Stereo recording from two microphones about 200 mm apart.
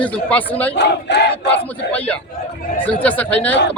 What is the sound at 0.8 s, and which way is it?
Battle cry, 60° left (ahead or behind).